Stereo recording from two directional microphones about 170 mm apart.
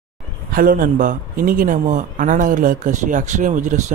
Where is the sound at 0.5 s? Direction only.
55° right (ahead or behind).